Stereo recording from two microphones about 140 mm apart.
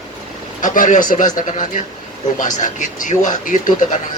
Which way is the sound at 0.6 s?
65° left (ahead or behind).